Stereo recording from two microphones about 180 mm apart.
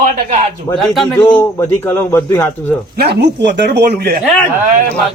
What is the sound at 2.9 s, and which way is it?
Speech, 65° right (ahead or behind).